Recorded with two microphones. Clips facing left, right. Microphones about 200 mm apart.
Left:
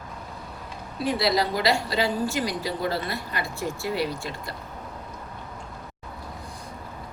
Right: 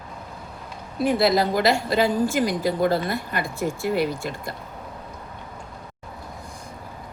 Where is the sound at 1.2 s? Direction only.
50° right (ahead or behind).